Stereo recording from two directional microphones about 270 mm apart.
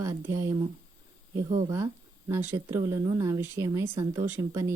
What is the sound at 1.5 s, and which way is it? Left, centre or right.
Speech, right.